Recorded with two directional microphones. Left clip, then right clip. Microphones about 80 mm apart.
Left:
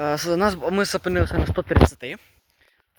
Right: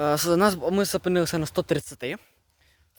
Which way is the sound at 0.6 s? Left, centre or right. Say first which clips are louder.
Left 2 dB; right.